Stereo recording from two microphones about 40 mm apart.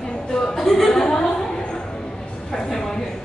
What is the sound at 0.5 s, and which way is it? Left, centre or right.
Chuckle, centre.